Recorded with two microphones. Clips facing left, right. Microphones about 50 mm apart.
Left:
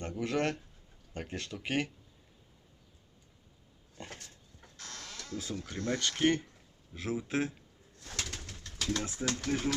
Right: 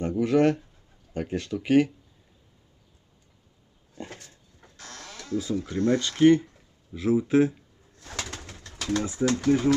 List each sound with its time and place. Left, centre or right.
0.0 s speech: centre
3.9 s a sound: centre
6.2 s speech: right
8.0 s bird: right
8.4 s speech: right
9.5 s speech: centre